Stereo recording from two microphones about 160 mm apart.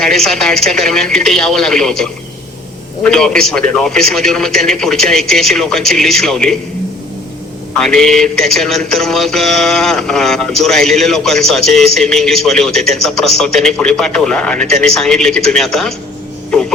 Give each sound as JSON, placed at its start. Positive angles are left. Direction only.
{"t": 0.0, "sound": "mantra", "side_deg": 0}
{"t": 7.8, "sound": "mantra", "side_deg": 5}
{"t": 16.5, "sound": "a sound", "side_deg": 5}